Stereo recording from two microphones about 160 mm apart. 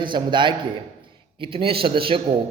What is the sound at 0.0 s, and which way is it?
A man's voice, 30° right (ahead or behind).